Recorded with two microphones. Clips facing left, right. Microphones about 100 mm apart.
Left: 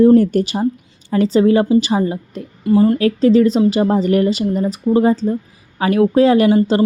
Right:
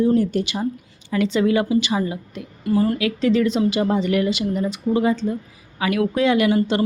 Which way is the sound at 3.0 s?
40° left (ahead or behind).